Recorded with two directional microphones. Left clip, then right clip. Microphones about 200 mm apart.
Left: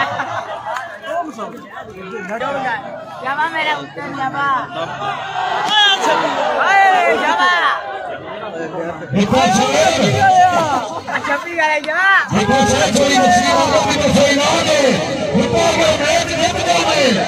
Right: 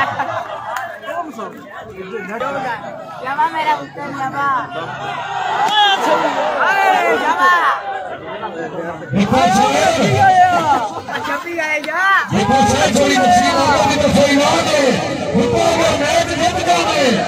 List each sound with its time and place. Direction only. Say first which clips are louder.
3.3 s speech: right 1 dB; 10° left (ahead or behind)
5.7 s speech: left 1 dB; 40° left (ahead or behind)
6.6 s speech: left 2 dB; 15° left (ahead or behind)
9.2 s speech: right 1 dB; 25° left (ahead or behind)
12.3 s a man's voice: even; 25° left (ahead or behind)